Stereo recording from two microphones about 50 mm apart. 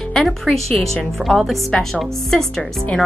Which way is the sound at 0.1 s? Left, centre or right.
Centre.